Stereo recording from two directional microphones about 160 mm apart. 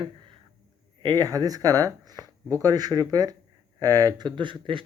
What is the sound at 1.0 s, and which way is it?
Speech, 25° right (ahead or behind).